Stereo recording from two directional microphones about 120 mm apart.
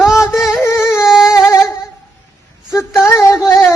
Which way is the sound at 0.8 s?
5° right (ahead or behind).